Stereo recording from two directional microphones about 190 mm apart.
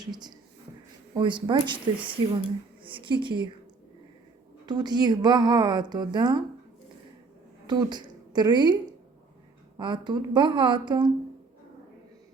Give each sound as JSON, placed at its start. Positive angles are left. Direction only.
{"t": 0.0, "sound": "a woman's voice", "side_deg": -20}
{"t": 2.8, "sound": "speech", "side_deg": -25}
{"t": 4.6, "sound": "a woman's voice", "side_deg": -20}
{"t": 7.7, "sound": "a woman's voice", "side_deg": -20}